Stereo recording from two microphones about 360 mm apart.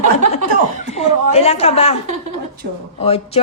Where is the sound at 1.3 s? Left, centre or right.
Centre.